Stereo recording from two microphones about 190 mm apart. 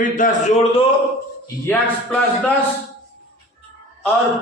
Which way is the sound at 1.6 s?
5° left (ahead or behind).